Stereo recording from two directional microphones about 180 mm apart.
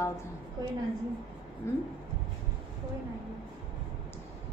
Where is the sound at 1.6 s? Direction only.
15° left (ahead or behind).